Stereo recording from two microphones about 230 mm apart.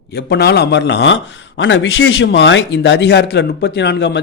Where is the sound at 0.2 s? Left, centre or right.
Left.